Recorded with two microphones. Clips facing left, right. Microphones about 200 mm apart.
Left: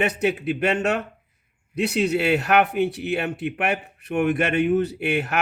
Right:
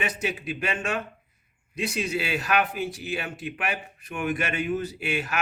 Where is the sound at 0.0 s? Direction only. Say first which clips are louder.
Left 8 dB; 60° left (ahead or behind).